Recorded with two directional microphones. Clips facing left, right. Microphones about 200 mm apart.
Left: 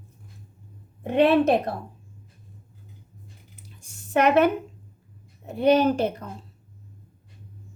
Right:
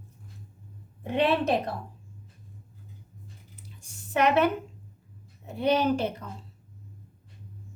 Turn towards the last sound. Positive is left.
turn(degrees=50)  # may be behind; listen again after turning